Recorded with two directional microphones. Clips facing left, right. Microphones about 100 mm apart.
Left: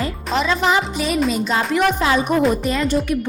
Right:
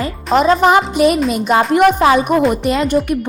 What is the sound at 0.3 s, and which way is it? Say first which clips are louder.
A woman's voice: right 7 dB; 45° right (ahead or behind).